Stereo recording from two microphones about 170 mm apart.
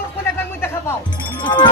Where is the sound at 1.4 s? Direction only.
25° left (ahead or behind).